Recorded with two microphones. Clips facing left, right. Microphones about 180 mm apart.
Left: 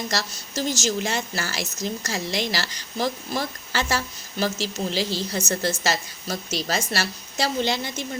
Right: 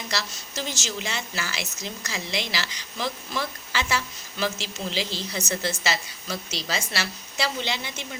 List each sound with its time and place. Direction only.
0.1 s a woman's voice: 45° left (ahead or behind)